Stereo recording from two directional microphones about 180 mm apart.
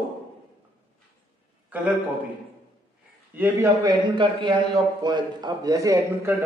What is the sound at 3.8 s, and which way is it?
A man's voice, 25° right (ahead or behind).